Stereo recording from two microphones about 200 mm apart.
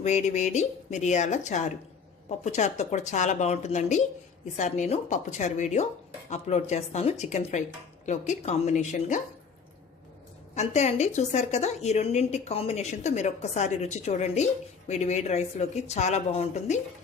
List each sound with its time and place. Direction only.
0.0 s a woman's voice: 35° left (ahead or behind)
10.5 s a woman's voice: 35° left (ahead or behind)